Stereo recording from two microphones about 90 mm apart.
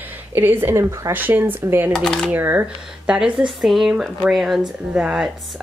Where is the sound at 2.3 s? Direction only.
20° right (ahead or behind).